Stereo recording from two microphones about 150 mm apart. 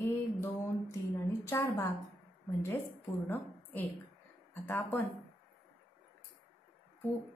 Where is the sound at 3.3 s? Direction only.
15° left (ahead or behind).